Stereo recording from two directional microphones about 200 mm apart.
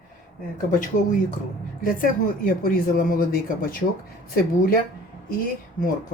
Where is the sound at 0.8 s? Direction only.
40° left (ahead or behind).